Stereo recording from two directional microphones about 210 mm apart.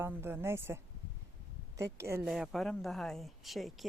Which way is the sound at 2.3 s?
Centre (ahead or behind).